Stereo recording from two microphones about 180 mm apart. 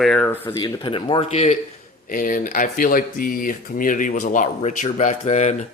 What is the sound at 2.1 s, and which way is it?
Speech, 50° left (ahead or behind).